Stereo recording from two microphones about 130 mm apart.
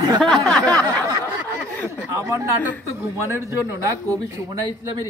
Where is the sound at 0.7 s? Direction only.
10° left (ahead or behind).